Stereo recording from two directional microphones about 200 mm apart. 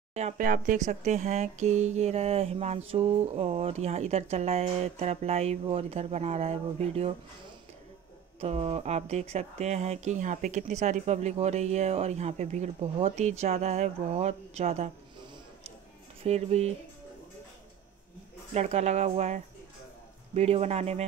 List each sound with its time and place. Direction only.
0.1 s speech: 40° right (ahead or behind)
8.4 s speech: 30° right (ahead or behind)
16.2 s speech: 30° right (ahead or behind)
18.5 s speech: 35° right (ahead or behind)